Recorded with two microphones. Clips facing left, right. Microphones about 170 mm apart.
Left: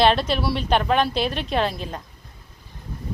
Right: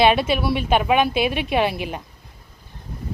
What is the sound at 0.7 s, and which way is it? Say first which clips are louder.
Speech: right 2 dB; 10° right (ahead or behind).